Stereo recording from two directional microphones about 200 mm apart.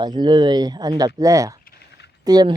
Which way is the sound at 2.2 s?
20° right (ahead or behind).